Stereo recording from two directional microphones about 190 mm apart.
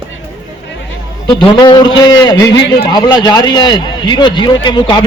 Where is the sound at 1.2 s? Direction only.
25° left (ahead or behind).